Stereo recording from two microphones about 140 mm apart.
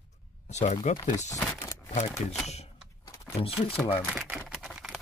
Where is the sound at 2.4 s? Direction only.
50° left (ahead or behind).